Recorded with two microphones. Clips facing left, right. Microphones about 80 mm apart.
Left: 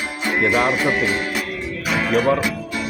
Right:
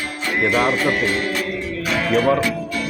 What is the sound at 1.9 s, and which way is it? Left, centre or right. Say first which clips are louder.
Music: even; centre.